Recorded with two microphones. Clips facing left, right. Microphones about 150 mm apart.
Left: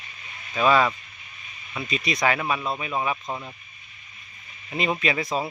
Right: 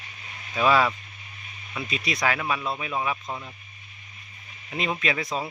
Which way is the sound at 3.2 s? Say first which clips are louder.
Left 2 dB; 15° left (ahead or behind).